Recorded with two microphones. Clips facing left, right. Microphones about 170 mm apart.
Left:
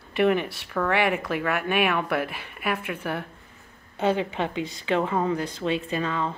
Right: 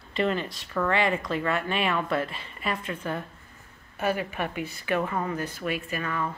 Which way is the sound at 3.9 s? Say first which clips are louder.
Left 4 dB; 25° left (ahead or behind).